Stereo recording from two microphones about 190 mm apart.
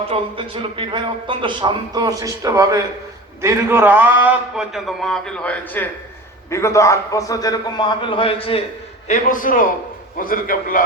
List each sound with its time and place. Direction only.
0.0 s a man's voice: 30° right (ahead or behind); by 8.6 s 30° left (ahead or behind)
9.0 s a man's voice: 40° left (ahead or behind)